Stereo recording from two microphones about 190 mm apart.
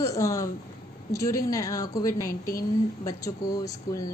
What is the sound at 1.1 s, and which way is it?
A woman's voice, 15° left (ahead or behind).